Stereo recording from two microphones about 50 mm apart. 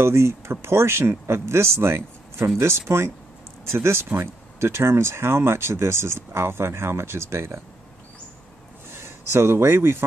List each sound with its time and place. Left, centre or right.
0.0 s speech: right
8.9 s speech: right